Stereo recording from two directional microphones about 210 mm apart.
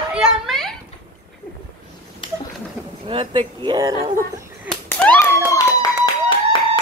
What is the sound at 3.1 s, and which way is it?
Speech, 25° right (ahead or behind).